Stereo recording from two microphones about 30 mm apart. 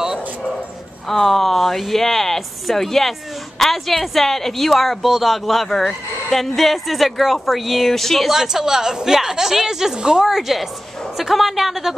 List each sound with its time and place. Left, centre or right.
1.0 s speech: centre
8.3 s a woman's voice: centre
10.3 s a woman's voice: centre